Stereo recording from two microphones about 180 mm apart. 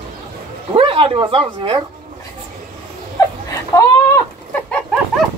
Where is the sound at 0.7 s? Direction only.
30° right (ahead or behind).